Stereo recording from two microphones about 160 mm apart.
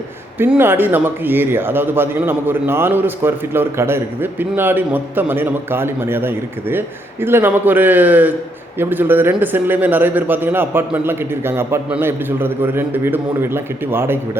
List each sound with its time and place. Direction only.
0.3 s a man's voice: 10° right (ahead or behind)